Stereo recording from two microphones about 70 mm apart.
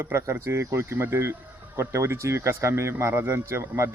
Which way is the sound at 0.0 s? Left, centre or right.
Right.